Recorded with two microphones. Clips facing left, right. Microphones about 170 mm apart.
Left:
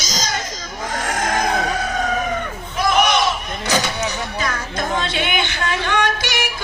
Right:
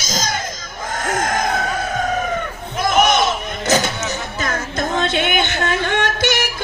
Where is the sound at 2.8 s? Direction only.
50° right (ahead or behind).